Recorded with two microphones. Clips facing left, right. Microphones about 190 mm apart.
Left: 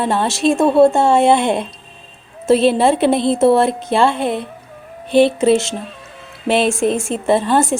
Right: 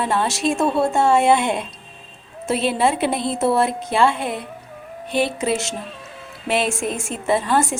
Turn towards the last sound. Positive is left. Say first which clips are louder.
# left 5 dB
turn(degrees=30)  # may be behind; listen again after turning